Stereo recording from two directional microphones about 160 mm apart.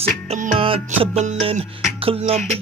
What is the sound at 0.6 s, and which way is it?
Music, 35° right (ahead or behind).